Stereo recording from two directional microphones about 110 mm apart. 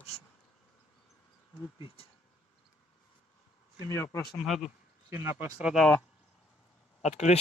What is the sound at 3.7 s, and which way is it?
Speech, 25° left (ahead or behind).